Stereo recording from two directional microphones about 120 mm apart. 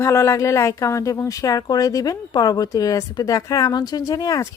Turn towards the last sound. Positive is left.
turn(degrees=30)  # may be behind; listen again after turning